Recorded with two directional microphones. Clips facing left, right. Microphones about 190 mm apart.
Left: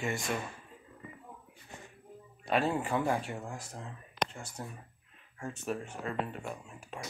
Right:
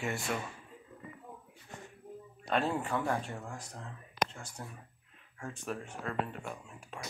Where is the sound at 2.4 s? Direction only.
5° left (ahead or behind).